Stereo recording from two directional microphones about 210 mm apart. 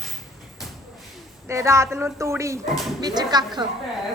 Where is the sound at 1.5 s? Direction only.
15° right (ahead or behind).